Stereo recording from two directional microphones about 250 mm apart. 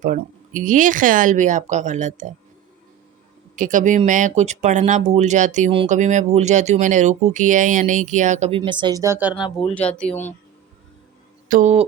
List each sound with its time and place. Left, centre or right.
0.0 s speech: right
3.5 s speech: right; by 9.3 s centre
9.4 s speech: centre
11.4 s speech: right